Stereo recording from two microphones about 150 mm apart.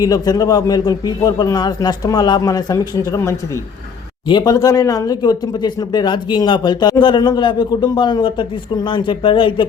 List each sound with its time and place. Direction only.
0.0 s speech: 25° left (ahead or behind)